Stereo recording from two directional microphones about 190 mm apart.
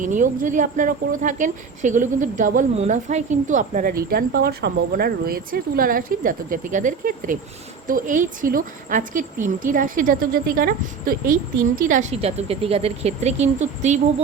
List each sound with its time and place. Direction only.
0.0 s speech: 40° right (ahead or behind)